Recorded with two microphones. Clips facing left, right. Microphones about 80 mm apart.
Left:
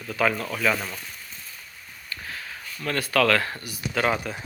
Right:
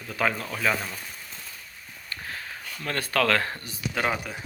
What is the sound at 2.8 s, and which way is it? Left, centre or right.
Speech, right.